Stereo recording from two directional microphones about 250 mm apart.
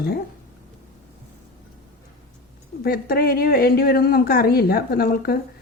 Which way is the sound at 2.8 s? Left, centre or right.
Left.